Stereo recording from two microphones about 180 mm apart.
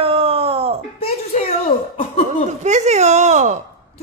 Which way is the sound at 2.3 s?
40° right (ahead or behind).